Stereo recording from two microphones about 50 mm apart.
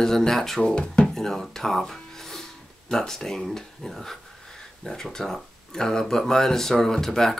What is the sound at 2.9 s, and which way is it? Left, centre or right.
Speech, centre.